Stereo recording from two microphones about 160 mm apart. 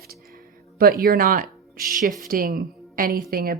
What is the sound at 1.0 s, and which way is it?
A woman's voice, 65° right (ahead or behind).